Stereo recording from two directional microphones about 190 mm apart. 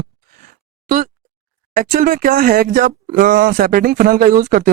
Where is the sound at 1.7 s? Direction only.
45° right (ahead or behind).